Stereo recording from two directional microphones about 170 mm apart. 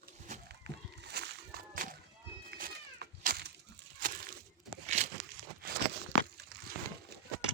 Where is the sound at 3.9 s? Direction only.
55° right (ahead or behind).